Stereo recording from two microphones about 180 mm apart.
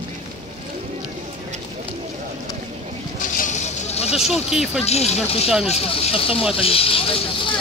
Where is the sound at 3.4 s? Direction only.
40° left (ahead or behind).